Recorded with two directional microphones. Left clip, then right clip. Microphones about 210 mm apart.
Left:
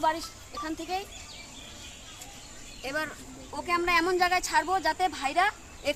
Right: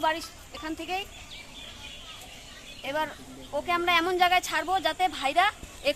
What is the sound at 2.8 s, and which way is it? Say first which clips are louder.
A woman's voice: right 2 dB; 35° right (ahead or behind).